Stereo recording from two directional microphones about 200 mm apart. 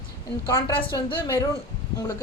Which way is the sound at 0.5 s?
20° left (ahead or behind).